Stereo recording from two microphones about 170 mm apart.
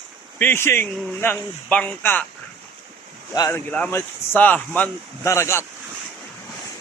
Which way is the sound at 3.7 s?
10° left (ahead or behind).